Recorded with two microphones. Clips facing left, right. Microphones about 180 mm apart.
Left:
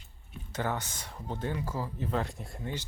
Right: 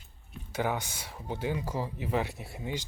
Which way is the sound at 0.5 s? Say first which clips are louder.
Right 2 dB; 10° right (ahead or behind).